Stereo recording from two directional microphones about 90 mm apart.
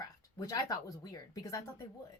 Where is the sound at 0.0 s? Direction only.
45° left (ahead or behind).